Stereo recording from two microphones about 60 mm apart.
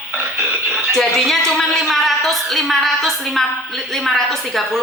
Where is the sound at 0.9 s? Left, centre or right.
Centre.